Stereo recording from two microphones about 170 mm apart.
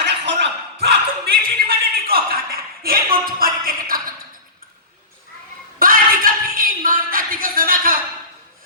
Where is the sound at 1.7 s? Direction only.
60° right (ahead or behind).